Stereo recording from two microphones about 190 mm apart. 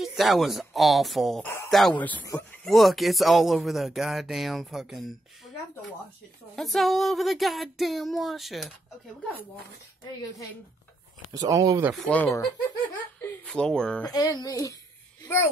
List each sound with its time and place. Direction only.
0.0 s speech: centre (ahead or behind)
6.5 s speech: centre (ahead or behind)
11.3 s speech: 20° right (ahead or behind)
11.9 s speech: 10° left (ahead or behind)
13.5 s speech: 5° left (ahead or behind)
14.1 s speech: 20° left (ahead or behind)